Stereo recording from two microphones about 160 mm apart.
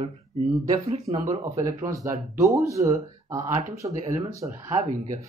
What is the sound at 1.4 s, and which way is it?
Speech, 20° right (ahead or behind).